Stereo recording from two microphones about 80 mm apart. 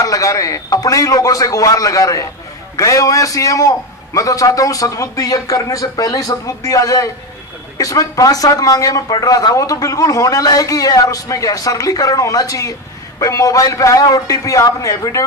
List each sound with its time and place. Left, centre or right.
0.0 s speech: left